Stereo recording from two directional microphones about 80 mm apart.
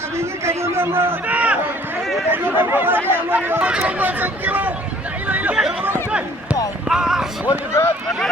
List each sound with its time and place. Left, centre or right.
0.2 s a man's voice: right
1.3 s run: centre
2.3 s speech: right
5.3 s chatter: centre
6.1 s a sound: centre
6.8 s speech: centre
7.5 s speech: left